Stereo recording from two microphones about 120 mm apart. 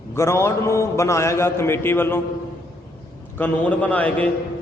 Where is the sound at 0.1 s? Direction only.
20° left (ahead or behind).